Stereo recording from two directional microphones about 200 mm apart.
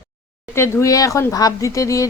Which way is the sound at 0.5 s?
15° left (ahead or behind).